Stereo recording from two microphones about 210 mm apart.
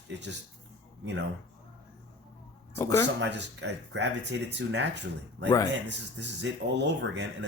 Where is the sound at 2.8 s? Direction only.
15° left (ahead or behind).